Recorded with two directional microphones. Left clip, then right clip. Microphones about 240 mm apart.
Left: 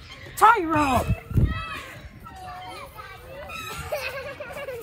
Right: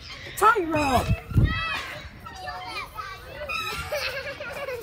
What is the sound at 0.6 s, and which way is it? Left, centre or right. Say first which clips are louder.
Speech: left 2 dB; left.